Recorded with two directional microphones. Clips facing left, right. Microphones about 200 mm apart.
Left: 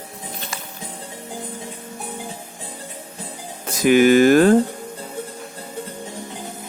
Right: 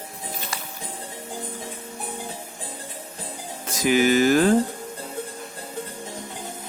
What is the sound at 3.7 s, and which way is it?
Speech, 60° left (ahead or behind).